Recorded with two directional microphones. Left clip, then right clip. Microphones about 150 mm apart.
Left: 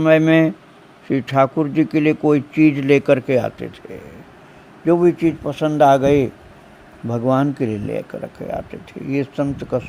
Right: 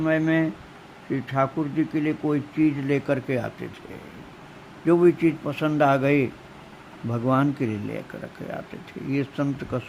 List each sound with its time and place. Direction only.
0.0 s speech: 55° left (ahead or behind)
4.9 s a man's voice: 20° left (ahead or behind)